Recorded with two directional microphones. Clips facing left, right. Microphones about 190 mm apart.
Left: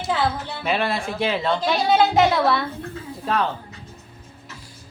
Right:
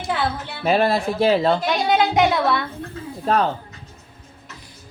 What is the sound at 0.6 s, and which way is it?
Speech, 40° right (ahead or behind).